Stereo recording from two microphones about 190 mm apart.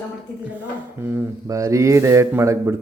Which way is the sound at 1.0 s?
10° right (ahead or behind).